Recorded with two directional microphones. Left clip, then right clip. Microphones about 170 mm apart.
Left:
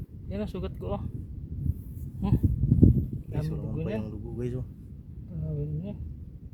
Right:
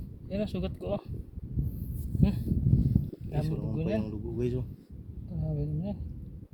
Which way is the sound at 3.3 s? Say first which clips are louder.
Right 6 dB; 35° left (ahead or behind).